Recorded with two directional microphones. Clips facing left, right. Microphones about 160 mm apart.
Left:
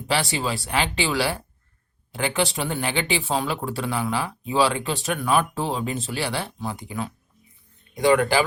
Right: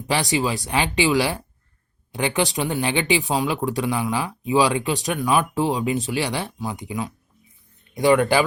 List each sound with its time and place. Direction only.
0.1 s speech: 20° right (ahead or behind)